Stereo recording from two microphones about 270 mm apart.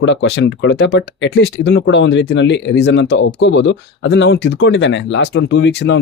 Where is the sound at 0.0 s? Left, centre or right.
Left.